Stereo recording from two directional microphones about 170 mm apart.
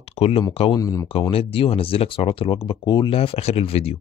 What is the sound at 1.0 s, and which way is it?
Speech, 35° left (ahead or behind).